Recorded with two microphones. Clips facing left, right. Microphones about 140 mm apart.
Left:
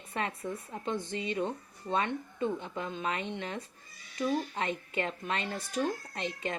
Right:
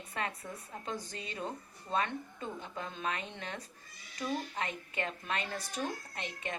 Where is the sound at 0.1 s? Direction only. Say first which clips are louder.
Left 5 dB; 25° left (ahead or behind).